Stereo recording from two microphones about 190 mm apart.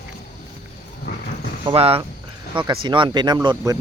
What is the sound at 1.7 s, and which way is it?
Speech, 30° right (ahead or behind).